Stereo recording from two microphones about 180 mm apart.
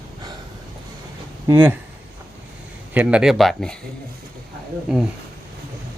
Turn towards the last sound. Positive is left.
turn(degrees=-5)  # may be behind; listen again after turning